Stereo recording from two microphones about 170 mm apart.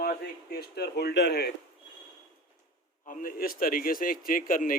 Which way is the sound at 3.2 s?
55° left (ahead or behind).